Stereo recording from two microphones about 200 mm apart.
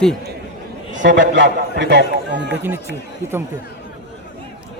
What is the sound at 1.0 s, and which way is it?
A man's voice, 60° right (ahead or behind).